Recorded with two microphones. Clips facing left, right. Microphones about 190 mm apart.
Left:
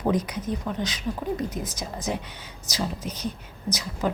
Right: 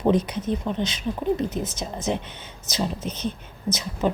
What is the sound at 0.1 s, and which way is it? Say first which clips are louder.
A woman's voice: right 4 dB; 25° right (ahead or behind).